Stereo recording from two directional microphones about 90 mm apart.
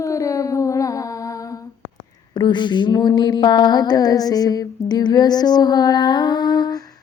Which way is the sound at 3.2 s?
50° left (ahead or behind).